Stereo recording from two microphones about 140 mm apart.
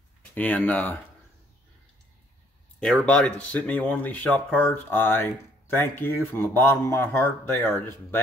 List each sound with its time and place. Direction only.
0.3 s speech: 10° left (ahead or behind)
2.8 s speech: 5° left (ahead or behind)